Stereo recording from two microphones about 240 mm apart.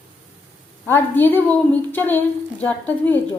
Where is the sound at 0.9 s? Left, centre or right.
Centre.